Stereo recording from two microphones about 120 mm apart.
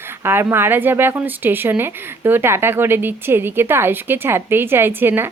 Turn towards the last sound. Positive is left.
turn(degrees=-20)  # may be behind; listen again after turning